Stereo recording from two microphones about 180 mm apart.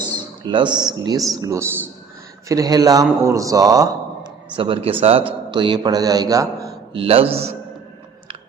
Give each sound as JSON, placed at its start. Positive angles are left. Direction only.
{"t": 0.1, "sound": "a man's voice", "side_deg": -25}
{"t": 6.9, "sound": "a man's voice", "side_deg": -30}